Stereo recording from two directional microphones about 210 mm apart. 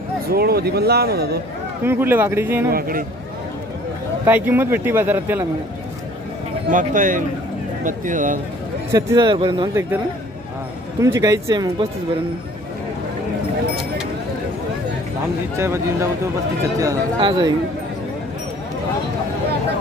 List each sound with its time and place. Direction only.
0.3 s speech: 50° right (ahead or behind)
1.9 s speech: 10° right (ahead or behind)
2.7 s speech: 40° right (ahead or behind)
4.3 s speech: 10° right (ahead or behind)
6.7 s speech: 35° right (ahead or behind)
8.9 s speech: 20° right (ahead or behind)
11.0 s speech: 15° right (ahead or behind)
15.5 s speech: 10° right (ahead or behind)